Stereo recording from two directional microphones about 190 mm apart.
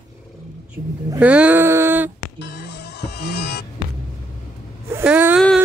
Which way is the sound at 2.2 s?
65° left (ahead or behind).